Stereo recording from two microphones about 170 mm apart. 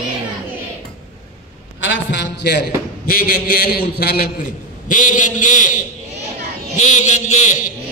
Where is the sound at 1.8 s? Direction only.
90° left; by 4.3 s 65° left (ahead or behind).